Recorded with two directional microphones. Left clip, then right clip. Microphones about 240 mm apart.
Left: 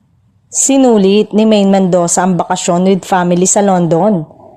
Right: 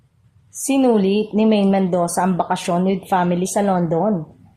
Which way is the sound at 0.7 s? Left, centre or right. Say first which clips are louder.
Left 7 dB; left.